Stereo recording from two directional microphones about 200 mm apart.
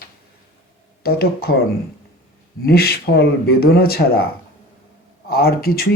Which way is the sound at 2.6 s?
50° left (ahead or behind).